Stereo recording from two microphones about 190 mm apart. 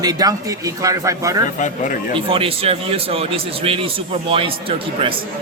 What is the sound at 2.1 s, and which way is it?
A man's voice, 30° right (ahead or behind).